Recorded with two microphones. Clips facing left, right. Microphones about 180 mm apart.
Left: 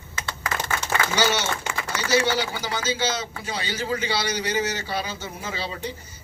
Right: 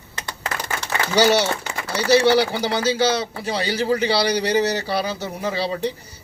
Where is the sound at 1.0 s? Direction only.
35° right (ahead or behind).